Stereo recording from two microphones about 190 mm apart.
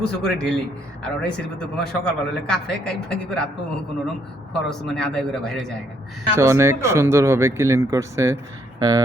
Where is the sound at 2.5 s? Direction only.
5° left (ahead or behind).